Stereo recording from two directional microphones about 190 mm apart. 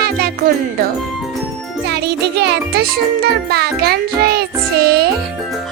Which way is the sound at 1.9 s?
60° right (ahead or behind).